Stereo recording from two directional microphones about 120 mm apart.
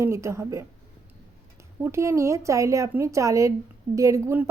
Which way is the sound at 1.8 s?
25° right (ahead or behind).